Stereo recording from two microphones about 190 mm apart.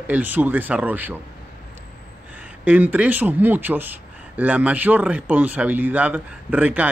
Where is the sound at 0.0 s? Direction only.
10° right (ahead or behind).